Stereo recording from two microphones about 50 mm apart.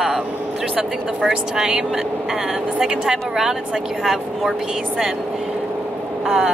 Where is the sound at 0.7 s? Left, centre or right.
Centre.